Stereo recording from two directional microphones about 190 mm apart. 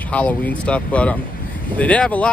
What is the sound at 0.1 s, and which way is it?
Speech, 5° left (ahead or behind).